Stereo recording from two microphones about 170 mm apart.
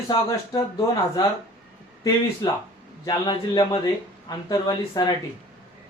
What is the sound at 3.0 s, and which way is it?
Speech, 25° left (ahead or behind).